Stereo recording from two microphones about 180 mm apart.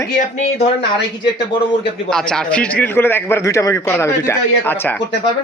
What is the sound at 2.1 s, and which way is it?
A man's voice, 5° left (ahead or behind).